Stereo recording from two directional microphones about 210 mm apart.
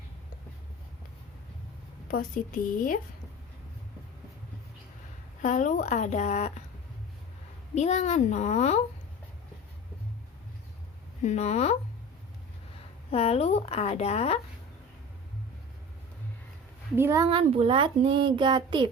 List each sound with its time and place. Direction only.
2.0 s speech: 40° left (ahead or behind)
5.4 s speech: 35° left (ahead or behind)
7.8 s speech: 35° left (ahead or behind)
11.2 s speech: 30° left (ahead or behind)
13.1 s speech: 30° left (ahead or behind)
16.9 s speech: 10° right (ahead or behind)
17.3 s a child's voice: 25° right (ahead or behind)